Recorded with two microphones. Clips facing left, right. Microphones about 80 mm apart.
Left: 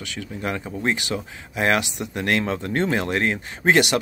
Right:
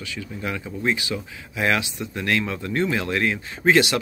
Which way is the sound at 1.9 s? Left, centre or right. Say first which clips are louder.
Left 1 dB; left.